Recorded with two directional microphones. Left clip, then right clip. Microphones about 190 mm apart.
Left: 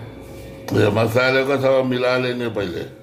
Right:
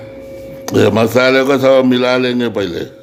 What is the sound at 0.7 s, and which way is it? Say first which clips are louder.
A man's voice: right 6 dB; 60° right (ahead or behind).